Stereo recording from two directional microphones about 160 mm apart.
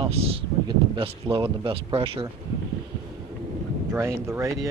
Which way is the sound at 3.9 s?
15° right (ahead or behind).